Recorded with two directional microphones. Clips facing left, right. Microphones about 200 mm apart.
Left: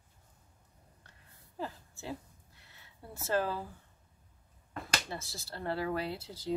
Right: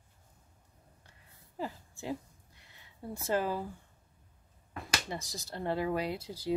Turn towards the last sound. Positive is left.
turn(degrees=-10)  # may be behind; listen again after turning